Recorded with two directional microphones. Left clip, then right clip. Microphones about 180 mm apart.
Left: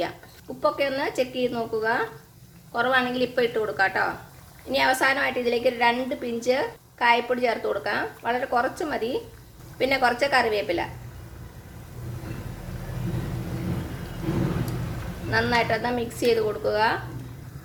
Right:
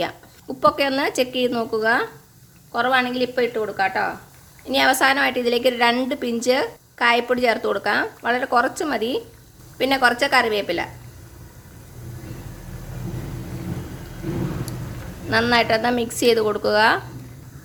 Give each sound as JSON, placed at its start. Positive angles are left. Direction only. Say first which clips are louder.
{"t": 0.6, "sound": "a woman's voice", "louder": "right 6 dB", "side_deg": -45}
{"t": 4.7, "sound": "a woman's voice", "louder": "right 4 dB", "side_deg": -40}
{"t": 15.3, "sound": "a woman's voice", "louder": "right 5 dB", "side_deg": -40}